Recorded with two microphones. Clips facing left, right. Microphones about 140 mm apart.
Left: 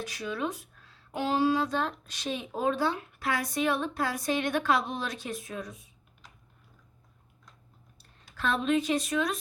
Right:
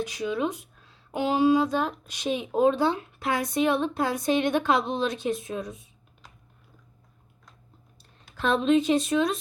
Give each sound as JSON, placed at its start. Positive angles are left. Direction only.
{"t": 0.0, "sound": "speech", "side_deg": -20}
{"t": 8.4, "sound": "speech", "side_deg": -20}